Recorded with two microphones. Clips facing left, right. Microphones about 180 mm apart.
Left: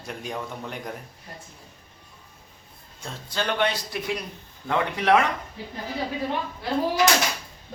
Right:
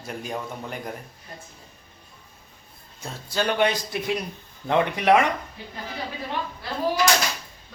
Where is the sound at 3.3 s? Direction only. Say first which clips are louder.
Right 3 dB; 10° right (ahead or behind).